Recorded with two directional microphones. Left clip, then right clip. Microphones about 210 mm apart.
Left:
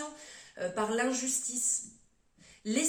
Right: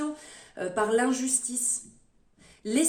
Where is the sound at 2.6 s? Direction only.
50° right (ahead or behind).